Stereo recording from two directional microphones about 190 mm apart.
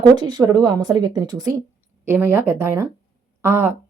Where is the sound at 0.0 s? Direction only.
20° right (ahead or behind).